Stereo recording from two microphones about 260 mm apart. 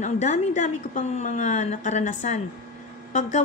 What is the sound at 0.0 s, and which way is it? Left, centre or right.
A woman's voice, left.